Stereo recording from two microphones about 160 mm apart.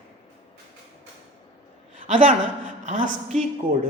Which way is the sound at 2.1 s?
55° right (ahead or behind).